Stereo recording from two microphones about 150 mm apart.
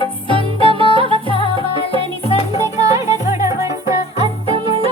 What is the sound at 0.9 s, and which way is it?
Music, 35° right (ahead or behind).